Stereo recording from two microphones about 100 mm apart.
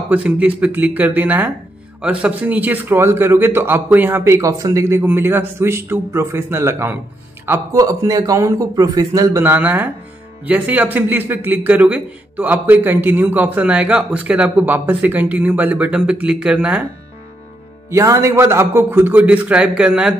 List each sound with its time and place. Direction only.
0.1 s a man's voice: 15° right (ahead or behind)
7.7 s a man's voice: 35° right (ahead or behind)
9.4 s speech: 20° right (ahead or behind)
17.8 s a man's voice: 30° right (ahead or behind); by 20.2 s 10° right (ahead or behind)